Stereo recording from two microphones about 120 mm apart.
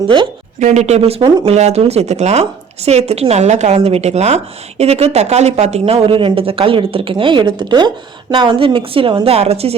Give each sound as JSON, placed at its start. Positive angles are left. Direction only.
{"t": 0.6, "sound": "a woman's voice", "side_deg": -70}